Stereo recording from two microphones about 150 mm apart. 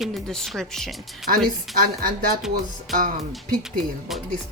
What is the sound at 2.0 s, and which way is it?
Speech, 65° right (ahead or behind).